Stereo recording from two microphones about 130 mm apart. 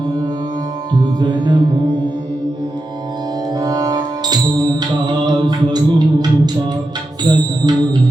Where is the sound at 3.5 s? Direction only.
30° right (ahead or behind).